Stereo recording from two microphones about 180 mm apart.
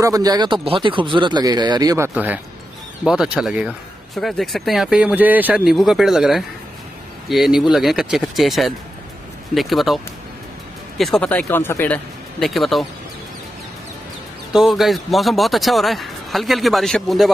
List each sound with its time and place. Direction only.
0.0 s speech: 20° right (ahead or behind)
2.1 s speech: 10° right (ahead or behind)
11.0 s speech: centre (ahead or behind)
12.4 s speech: centre (ahead or behind)
14.5 s speech: centre (ahead or behind)